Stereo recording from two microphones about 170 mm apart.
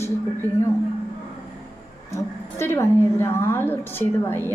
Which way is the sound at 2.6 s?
15° left (ahead or behind).